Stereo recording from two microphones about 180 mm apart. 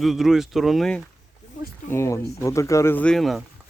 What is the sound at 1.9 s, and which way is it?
Speech, 15° left (ahead or behind).